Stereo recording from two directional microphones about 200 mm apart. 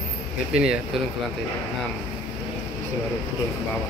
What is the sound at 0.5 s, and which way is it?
Speech, 5° right (ahead or behind).